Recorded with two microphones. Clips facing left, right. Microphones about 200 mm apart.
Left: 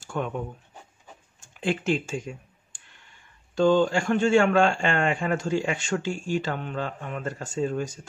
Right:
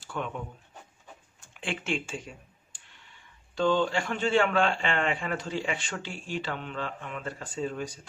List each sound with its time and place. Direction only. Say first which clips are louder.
0.0 s a sound: left 5 dB; 45° left (ahead or behind)
1.5 s speech: left 7 dB; 40° left (ahead or behind)
2.7 s clicking: left 2 dB; 50° left (ahead or behind)
3.5 s a man's voice: left 5 dB; 45° left (ahead or behind)